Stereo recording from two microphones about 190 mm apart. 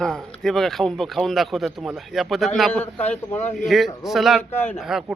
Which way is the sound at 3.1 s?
10° left (ahead or behind).